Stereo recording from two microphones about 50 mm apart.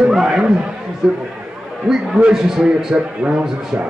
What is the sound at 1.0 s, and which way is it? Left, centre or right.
A man's voice, centre.